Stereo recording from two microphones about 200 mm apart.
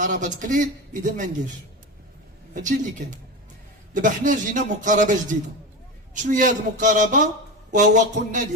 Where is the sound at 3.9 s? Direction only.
40° right (ahead or behind).